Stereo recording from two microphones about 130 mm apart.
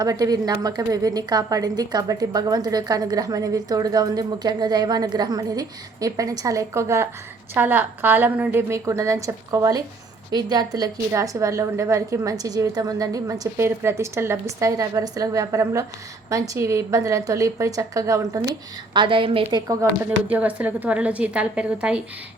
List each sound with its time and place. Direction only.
0.0 s a woman's voice: 30° right (ahead or behind)
18.9 s a woman's voice: 40° right (ahead or behind)
20.1 s a woman's voice: 10° right (ahead or behind)